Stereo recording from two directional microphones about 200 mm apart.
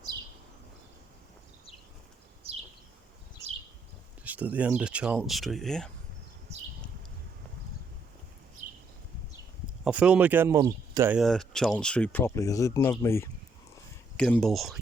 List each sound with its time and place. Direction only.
2.4 s a sound: 30° right (ahead or behind)
4.2 s speech: 10° right (ahead or behind)
9.8 s speech: 5° right (ahead or behind)
11.2 s speech: centre (ahead or behind)